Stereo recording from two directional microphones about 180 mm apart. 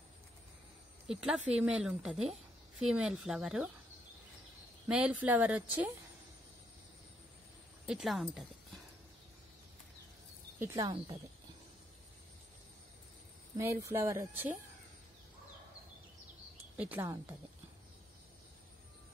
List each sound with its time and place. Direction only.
1.0 s speech: 5° right (ahead or behind)
4.8 s speech: 5° right (ahead or behind)
7.8 s speech: centre (ahead or behind)
10.6 s speech: 15° right (ahead or behind)
13.6 s speech: 15° right (ahead or behind)
16.7 s speech: 10° right (ahead or behind)